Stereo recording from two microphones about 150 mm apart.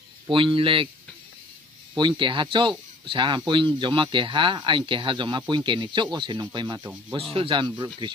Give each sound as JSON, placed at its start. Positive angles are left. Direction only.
{"t": 0.3, "sound": "speech", "side_deg": -35}
{"t": 2.0, "sound": "speech", "side_deg": -30}